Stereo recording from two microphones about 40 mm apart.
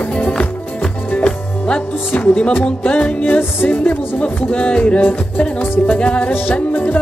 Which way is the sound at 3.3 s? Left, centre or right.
Left.